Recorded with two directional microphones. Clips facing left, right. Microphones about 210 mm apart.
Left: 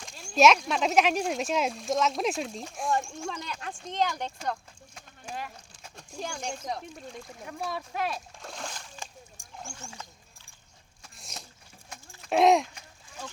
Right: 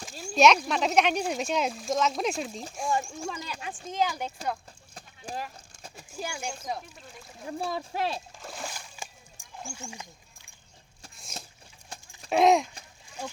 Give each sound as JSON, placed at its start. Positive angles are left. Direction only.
{"t": 0.0, "sound": "speech", "side_deg": -5}
{"t": 4.9, "sound": "clip-clop", "side_deg": -35}
{"t": 6.0, "sound": "speech", "side_deg": -5}
{"t": 7.4, "sound": "speech", "side_deg": -30}
{"t": 8.4, "sound": "splash", "side_deg": -5}
{"t": 9.6, "sound": "speech", "side_deg": -10}
{"t": 11.9, "sound": "a sound", "side_deg": -30}
{"t": 12.3, "sound": "speech", "side_deg": 0}
{"t": 13.2, "sound": "speech", "side_deg": -10}